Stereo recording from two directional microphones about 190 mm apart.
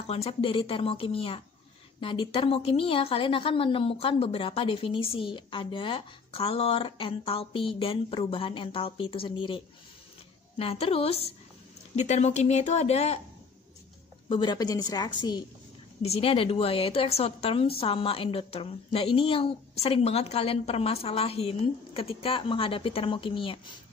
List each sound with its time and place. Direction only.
0.0 s a woman's voice: 30° left (ahead or behind)
10.6 s speech: 30° left (ahead or behind)
14.3 s a woman's voice: 25° left (ahead or behind)